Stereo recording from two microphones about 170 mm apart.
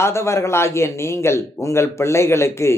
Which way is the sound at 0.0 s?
15° left (ahead or behind).